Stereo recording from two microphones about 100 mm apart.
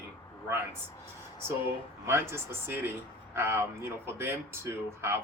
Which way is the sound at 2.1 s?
25° right (ahead or behind).